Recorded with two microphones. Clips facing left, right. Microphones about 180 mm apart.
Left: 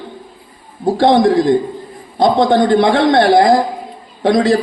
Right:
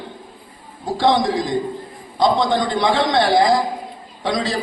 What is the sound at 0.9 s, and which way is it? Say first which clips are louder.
A man's voice: left 6 dB; 55° left (ahead or behind).